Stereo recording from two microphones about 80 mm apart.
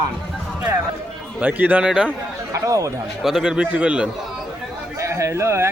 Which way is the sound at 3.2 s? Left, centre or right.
Centre.